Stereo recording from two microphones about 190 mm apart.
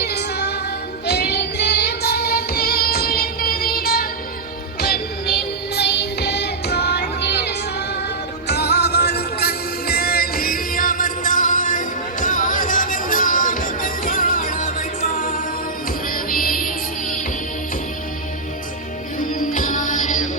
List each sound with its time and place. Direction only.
0.0 s music: 60° left (ahead or behind)
1.0 s child singing: 60° left (ahead or behind)
4.8 s music: 55° left (ahead or behind)
19.3 s music: 45° left (ahead or behind)